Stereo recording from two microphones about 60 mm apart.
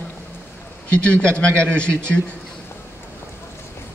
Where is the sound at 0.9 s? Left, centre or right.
Centre.